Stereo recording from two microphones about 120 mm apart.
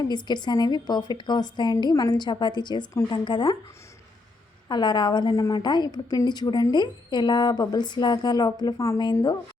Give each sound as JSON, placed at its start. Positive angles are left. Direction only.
{"t": 0.0, "sound": "a woman's voice", "side_deg": 35}
{"t": 4.7, "sound": "a woman's voice", "side_deg": 40}